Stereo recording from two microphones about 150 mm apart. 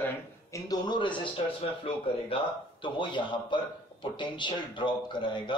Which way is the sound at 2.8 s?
30° left (ahead or behind).